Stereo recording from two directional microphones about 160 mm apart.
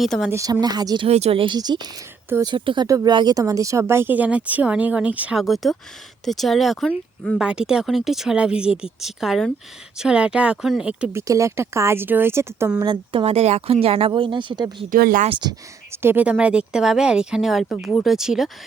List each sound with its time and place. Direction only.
0.0 s speech: centre (ahead or behind)
0.3 s speech: 15° right (ahead or behind)
1.0 s speech: 40° right (ahead or behind); by 11.2 s 5° right (ahead or behind)
11.2 s speech: 20° right (ahead or behind)
13.2 s speech: 40° right (ahead or behind)
14.8 s speech: 60° right (ahead or behind)
15.9 s speech: 15° right (ahead or behind)